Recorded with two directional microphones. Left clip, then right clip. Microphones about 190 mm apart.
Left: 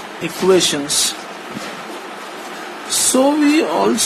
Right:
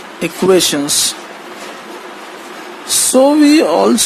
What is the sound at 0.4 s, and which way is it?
Speech, 55° right (ahead or behind).